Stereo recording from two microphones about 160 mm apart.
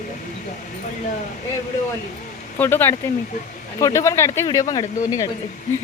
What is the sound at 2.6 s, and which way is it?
Speech, 10° left (ahead or behind).